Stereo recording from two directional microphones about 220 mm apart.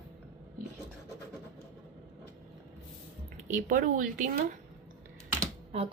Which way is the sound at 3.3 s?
35° right (ahead or behind).